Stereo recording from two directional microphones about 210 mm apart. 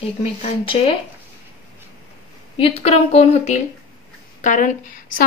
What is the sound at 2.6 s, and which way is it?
A woman's voice, 30° left (ahead or behind).